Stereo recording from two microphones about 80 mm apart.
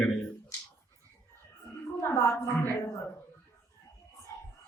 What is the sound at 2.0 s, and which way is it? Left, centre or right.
Speech, left.